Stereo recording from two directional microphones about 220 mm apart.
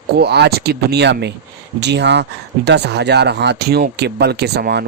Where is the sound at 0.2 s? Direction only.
50° right (ahead or behind).